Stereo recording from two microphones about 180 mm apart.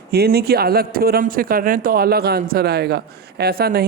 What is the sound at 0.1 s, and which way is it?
A man's voice, 60° right (ahead or behind).